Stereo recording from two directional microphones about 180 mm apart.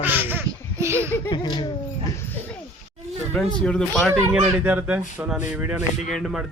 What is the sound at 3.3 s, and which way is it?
Speech, 5° left (ahead or behind).